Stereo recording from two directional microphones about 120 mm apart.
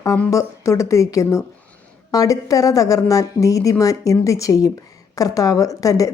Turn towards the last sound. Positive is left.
turn(degrees=30)  # may be behind; listen again after turning